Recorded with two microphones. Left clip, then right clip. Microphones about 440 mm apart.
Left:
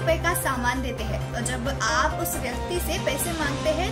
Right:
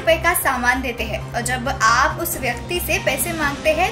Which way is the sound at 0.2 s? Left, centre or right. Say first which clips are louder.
Right 7 dB; left.